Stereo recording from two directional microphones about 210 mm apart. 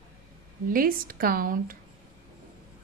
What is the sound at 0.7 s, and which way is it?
A woman's voice, 45° right (ahead or behind).